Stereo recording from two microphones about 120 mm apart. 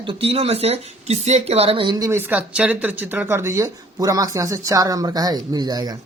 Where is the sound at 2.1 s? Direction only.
15° right (ahead or behind).